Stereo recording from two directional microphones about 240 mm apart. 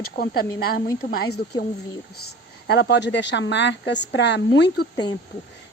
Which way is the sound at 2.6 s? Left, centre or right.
Left.